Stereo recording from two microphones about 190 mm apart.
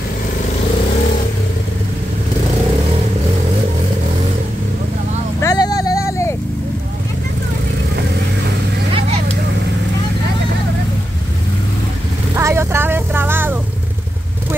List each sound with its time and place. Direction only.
5.4 s vehicle: 20° left (ahead or behind)
12.4 s vehicle: 15° right (ahead or behind)